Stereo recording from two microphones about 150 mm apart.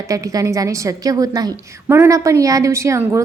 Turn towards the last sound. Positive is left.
turn(degrees=-20)  # may be behind; listen again after turning